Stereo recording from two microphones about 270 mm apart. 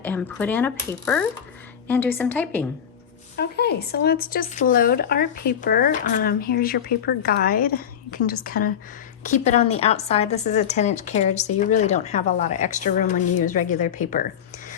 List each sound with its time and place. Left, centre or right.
0.0 s a woman's voice: centre
3.3 s a woman's voice: left